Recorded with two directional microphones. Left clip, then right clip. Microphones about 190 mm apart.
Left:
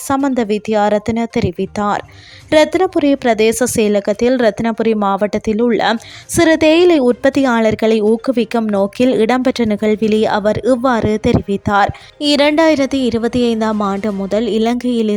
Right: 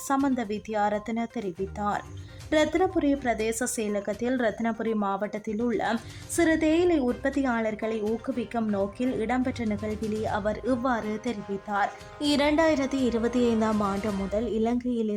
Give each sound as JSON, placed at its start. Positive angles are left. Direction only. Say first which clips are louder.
{"t": 0.1, "sound": "speech", "louder": "left 12 dB", "side_deg": 40}